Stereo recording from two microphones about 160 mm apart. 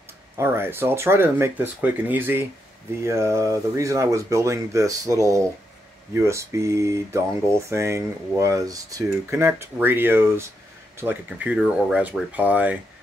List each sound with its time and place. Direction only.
0.4 s speech: 15° right (ahead or behind)